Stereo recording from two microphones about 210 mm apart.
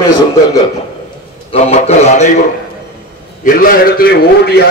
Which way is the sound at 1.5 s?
30° left (ahead or behind).